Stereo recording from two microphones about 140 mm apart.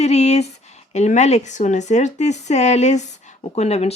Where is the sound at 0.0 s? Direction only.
50° left (ahead or behind).